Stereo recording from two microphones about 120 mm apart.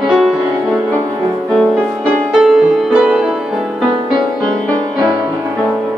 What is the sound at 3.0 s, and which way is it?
Music, 5° right (ahead or behind).